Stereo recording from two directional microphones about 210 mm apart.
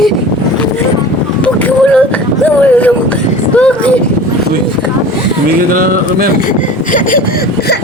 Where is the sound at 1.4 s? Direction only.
5° left (ahead or behind).